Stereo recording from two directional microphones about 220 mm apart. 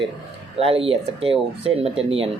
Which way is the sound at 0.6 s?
25° right (ahead or behind).